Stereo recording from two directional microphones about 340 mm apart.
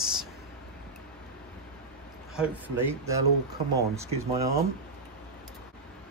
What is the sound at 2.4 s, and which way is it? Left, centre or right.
Speech, centre.